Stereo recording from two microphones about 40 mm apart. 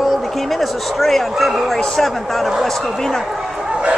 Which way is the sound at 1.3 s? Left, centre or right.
Centre.